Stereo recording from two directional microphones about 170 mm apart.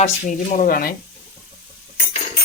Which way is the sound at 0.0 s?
50° left (ahead or behind).